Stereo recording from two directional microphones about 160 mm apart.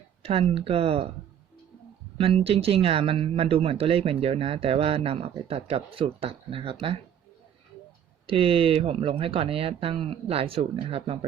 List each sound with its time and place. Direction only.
0.2 s speech: 40° right (ahead or behind)
2.1 s speech: 35° right (ahead or behind)
8.3 s speech: 35° right (ahead or behind)